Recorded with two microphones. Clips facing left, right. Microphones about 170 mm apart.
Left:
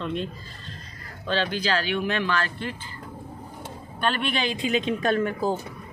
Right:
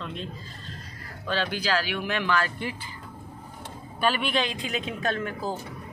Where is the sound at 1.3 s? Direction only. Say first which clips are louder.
Left 2 dB; 10° right (ahead or behind).